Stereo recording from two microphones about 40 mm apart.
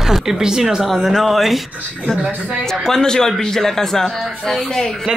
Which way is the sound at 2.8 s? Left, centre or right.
Centre.